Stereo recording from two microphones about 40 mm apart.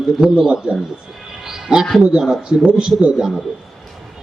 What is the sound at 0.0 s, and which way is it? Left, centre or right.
Speech, centre.